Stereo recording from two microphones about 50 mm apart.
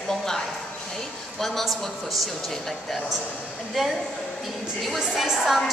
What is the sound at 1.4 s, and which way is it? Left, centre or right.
Speech, centre.